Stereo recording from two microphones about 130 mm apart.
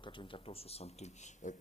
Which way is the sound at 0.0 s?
40° left (ahead or behind).